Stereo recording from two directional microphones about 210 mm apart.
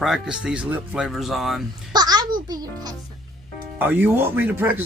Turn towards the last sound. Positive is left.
turn(degrees=-10)  # may be behind; listen again after turning